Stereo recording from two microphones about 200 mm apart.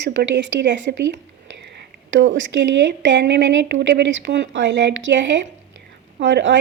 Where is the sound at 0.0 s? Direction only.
60° right (ahead or behind).